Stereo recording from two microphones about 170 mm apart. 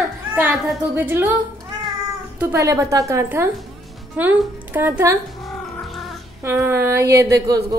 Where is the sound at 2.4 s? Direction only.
15° right (ahead or behind).